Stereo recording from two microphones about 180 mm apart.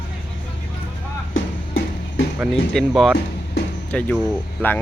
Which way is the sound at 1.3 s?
90° left.